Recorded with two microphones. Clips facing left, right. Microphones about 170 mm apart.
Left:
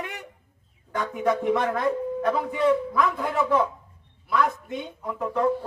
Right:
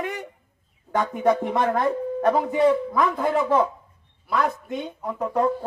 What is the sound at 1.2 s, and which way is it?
A man's voice, 40° right (ahead or behind).